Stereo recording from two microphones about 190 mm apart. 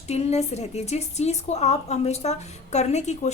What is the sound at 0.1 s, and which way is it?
A woman's voice, 35° left (ahead or behind).